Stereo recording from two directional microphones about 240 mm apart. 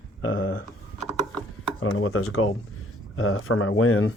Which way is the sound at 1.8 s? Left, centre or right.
Left.